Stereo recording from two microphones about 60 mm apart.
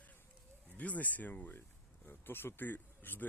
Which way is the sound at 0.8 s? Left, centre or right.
Left.